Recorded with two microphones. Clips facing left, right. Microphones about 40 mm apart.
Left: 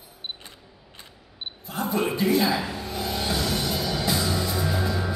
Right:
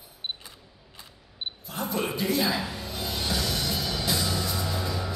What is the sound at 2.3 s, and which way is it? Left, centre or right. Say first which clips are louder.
Speech: left 4 dB; centre.